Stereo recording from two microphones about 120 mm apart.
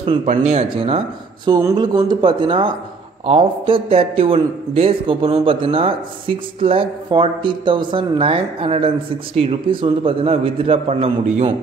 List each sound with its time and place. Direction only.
0.0 s speech: 45° right (ahead or behind)
0.3 s a man's voice: 65° right (ahead or behind)